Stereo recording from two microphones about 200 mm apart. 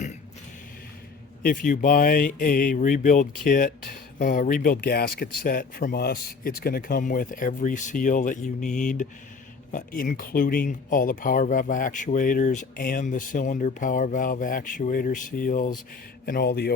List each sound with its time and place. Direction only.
1.4 s speech: 45° left (ahead or behind)
9.7 s speech: 40° left (ahead or behind)